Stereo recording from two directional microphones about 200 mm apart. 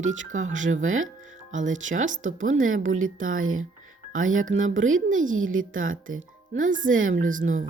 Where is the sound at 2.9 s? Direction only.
90° right.